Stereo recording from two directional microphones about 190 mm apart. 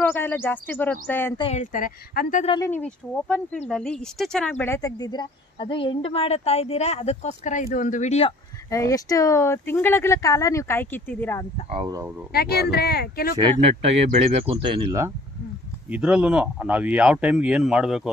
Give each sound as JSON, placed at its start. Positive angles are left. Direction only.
{"t": 0.1, "sound": "speech", "side_deg": 10}
{"t": 1.4, "sound": "speech", "side_deg": 35}
{"t": 2.6, "sound": "speech", "side_deg": 10}
{"t": 8.6, "sound": "speech", "side_deg": 15}
{"t": 11.7, "sound": "speech", "side_deg": -20}
{"t": 12.3, "sound": "speech", "side_deg": 55}
{"t": 13.4, "sound": "speech", "side_deg": -30}
{"t": 15.9, "sound": "speech", "side_deg": -5}